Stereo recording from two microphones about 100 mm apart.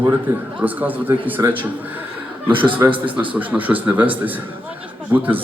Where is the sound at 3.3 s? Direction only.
15° right (ahead or behind).